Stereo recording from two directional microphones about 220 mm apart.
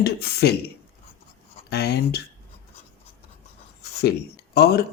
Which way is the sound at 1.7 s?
50° left (ahead or behind).